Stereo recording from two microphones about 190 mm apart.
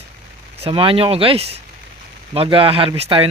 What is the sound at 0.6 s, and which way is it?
Speech, 30° right (ahead or behind).